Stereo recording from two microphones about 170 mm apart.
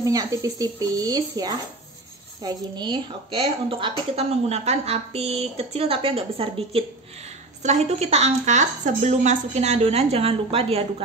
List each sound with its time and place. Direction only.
0.0 s a woman's voice: 20° right (ahead or behind); by 11.1 s 35° right (ahead or behind)